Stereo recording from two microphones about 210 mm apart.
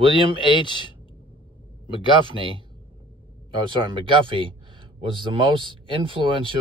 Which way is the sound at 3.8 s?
25° right (ahead or behind).